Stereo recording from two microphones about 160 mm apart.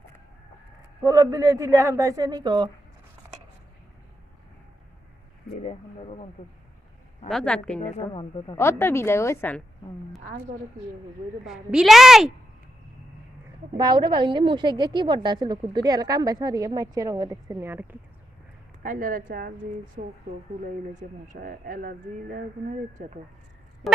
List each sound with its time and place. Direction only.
1.0 s a woman's voice: 25° right (ahead or behind)
5.5 s speech: 45° left (ahead or behind)
7.3 s a woman's voice: 5° left (ahead or behind)
7.8 s speech: 45° left (ahead or behind)
8.1 s a woman's voice: 30° left (ahead or behind)
8.5 s a woman's voice: 15° left (ahead or behind)
11.4 s a woman's voice: centre (ahead or behind)
13.7 s a woman's voice: 25° right (ahead or behind)
18.8 s speech: 55° right (ahead or behind)
21.2 s speech: 65° right (ahead or behind)
23.8 s a woman's voice: centre (ahead or behind)